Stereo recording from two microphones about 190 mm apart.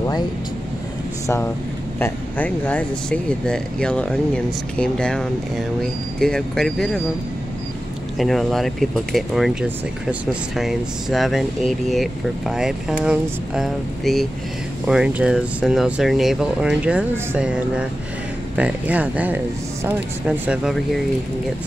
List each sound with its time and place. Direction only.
1.2 s speech: 15° left (ahead or behind)
8.2 s speech: centre (ahead or behind)